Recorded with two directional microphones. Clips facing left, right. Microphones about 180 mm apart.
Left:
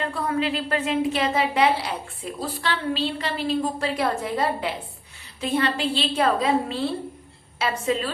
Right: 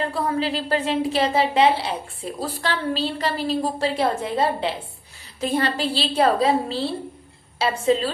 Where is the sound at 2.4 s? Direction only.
40° right (ahead or behind).